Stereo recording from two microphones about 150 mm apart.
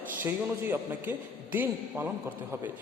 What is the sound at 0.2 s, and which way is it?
A man's voice, 15° right (ahead or behind).